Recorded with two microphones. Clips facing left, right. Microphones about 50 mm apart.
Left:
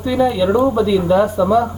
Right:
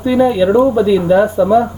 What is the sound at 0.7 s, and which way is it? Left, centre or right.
Speech, centre.